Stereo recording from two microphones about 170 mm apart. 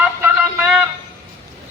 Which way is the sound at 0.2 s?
10° right (ahead or behind).